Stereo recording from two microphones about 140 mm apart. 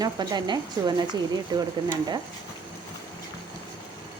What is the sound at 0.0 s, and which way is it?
A woman's voice, 30° right (ahead or behind).